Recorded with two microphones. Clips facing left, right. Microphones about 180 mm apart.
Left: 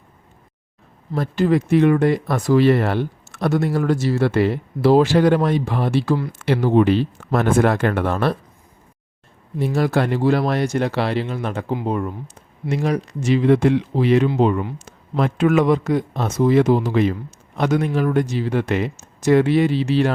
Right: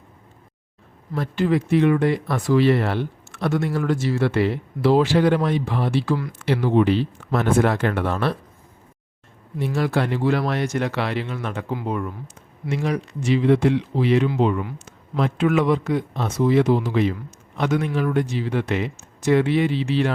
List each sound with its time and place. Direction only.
1.1 s speech: 40° left (ahead or behind)
9.6 s speech: 35° left (ahead or behind)
14.6 s a sound: 35° left (ahead or behind)
15.2 s speech: 45° left (ahead or behind)